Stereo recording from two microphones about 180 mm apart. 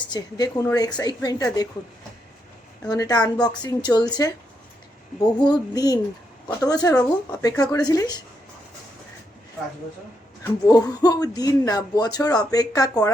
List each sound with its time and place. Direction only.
0.1 s speech: 20° left (ahead or behind)
2.9 s speech: 20° left (ahead or behind)
10.6 s speech: 20° left (ahead or behind)